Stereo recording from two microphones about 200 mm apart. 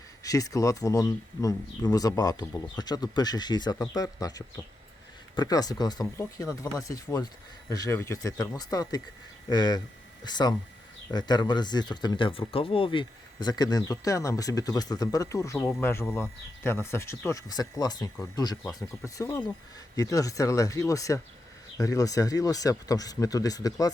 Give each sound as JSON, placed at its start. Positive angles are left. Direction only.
{"t": 0.2, "sound": "speech", "side_deg": 15}